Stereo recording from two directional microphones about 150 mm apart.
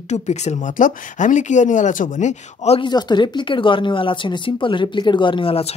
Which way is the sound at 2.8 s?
30° left (ahead or behind).